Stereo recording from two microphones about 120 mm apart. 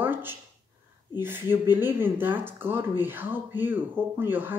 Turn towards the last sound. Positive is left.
turn(degrees=-15)  # may be behind; listen again after turning